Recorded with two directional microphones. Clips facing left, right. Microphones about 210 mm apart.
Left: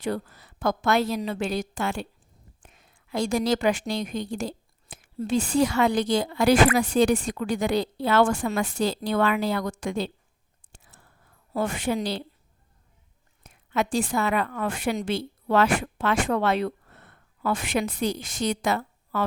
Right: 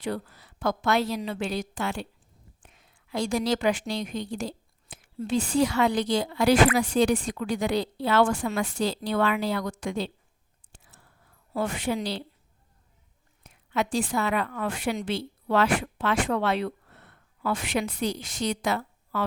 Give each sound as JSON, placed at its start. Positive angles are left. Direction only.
{"t": 0.0, "sound": "a woman's voice", "side_deg": 45}
{"t": 11.5, "sound": "a woman's voice", "side_deg": 45}
{"t": 13.4, "sound": "a woman's voice", "side_deg": 45}